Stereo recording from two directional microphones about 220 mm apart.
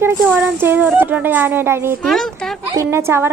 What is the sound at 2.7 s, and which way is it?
Speech, 10° right (ahead or behind).